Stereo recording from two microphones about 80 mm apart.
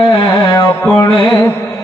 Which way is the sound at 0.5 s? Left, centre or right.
Left.